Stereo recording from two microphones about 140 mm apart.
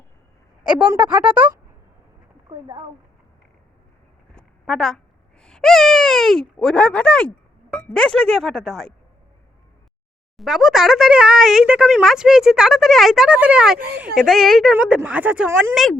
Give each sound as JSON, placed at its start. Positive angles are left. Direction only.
{"t": 0.8, "sound": "a woman's voice", "side_deg": -10}
{"t": 2.5, "sound": "speech", "side_deg": -30}
{"t": 4.4, "sound": "a sound", "side_deg": 5}
{"t": 5.4, "sound": "speech", "side_deg": 5}
{"t": 10.3, "sound": "a woman's voice", "side_deg": 0}
{"t": 14.3, "sound": "a woman's voice", "side_deg": 0}
{"t": 15.7, "sound": "speech", "side_deg": 0}